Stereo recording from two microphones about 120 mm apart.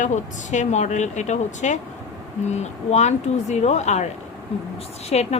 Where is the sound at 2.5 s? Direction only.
70° left (ahead or behind).